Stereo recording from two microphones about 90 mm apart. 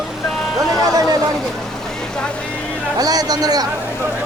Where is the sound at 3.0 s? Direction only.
45° right (ahead or behind).